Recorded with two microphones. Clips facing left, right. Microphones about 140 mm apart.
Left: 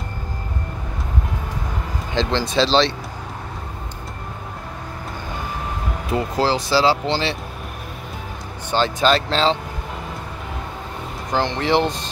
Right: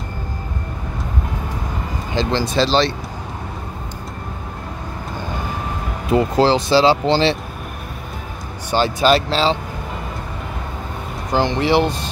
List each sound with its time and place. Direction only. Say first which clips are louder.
2.1 s speech: right 1 dB; 5° right (ahead or behind)
6.1 s speech: right 5 dB; 25° right (ahead or behind)
8.6 s speech: right 2 dB; 10° right (ahead or behind)
11.3 s speech: right 3 dB; 10° right (ahead or behind)